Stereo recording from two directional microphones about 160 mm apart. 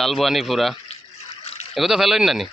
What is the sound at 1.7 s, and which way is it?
Speech, centre (ahead or behind).